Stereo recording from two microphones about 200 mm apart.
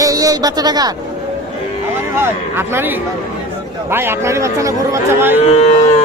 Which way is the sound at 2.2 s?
10° right (ahead or behind).